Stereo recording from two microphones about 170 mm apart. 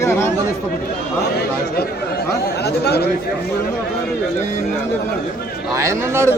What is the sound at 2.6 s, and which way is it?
Speech, 70° left (ahead or behind).